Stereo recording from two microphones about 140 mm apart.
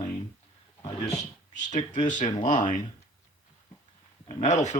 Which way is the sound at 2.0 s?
60° left (ahead or behind).